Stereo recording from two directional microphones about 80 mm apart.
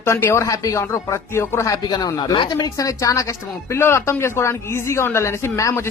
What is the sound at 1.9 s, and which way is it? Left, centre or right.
A woman's voice, left.